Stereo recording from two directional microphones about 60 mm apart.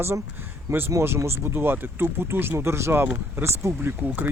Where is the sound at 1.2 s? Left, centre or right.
Right.